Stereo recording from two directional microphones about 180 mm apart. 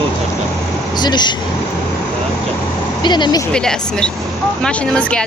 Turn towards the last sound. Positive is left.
turn(degrees=5)  # may be behind; listen again after turning